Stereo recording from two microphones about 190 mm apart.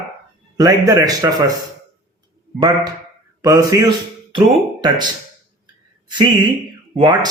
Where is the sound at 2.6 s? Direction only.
20° right (ahead or behind).